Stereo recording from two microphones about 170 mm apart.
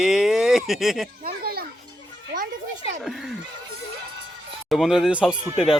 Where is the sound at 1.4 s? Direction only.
65° right (ahead or behind).